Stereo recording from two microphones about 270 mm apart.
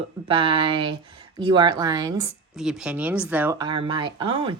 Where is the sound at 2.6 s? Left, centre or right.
Centre.